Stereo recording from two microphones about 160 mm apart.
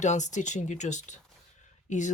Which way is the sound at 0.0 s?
50° left (ahead or behind).